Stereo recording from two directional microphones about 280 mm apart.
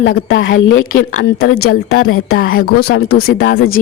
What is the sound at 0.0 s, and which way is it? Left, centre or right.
Speech, left.